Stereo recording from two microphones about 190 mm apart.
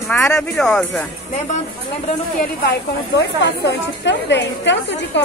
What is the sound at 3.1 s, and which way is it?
A woman's voice, 60° left (ahead or behind).